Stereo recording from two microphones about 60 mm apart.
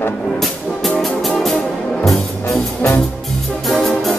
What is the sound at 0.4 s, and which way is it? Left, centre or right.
Music, centre.